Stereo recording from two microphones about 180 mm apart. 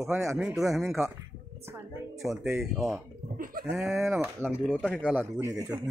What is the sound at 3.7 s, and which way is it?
Speech, 10° right (ahead or behind).